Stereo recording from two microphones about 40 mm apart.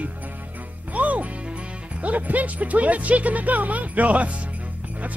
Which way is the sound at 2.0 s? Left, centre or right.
Right.